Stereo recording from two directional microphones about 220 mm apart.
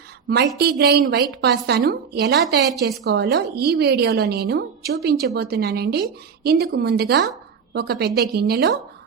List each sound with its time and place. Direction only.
0.3 s a woman's voice: 45° right (ahead or behind)